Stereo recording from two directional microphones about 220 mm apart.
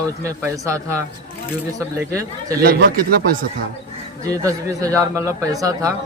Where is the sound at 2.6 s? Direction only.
45° right (ahead or behind).